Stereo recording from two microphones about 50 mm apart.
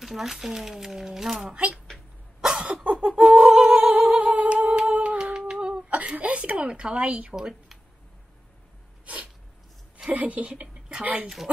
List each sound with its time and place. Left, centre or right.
0.0 s speech: centre
1.5 s speech: right
2.4 s cough: centre
3.7 s music: centre
4.2 s humming: right
9.0 s sneeze: right
10.1 s speech: right